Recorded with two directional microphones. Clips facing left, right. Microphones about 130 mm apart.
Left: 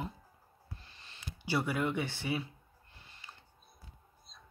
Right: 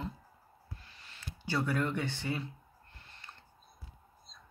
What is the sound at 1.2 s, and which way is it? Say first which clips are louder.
Speech: left 1 dB; 10° left (ahead or behind).